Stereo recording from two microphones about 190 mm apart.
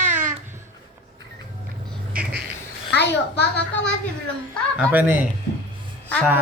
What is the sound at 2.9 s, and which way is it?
Speech, 60° left (ahead or behind).